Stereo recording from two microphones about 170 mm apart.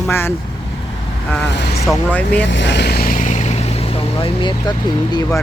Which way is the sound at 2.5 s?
90° left.